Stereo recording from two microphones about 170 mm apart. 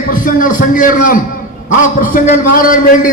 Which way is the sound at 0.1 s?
55° left (ahead or behind).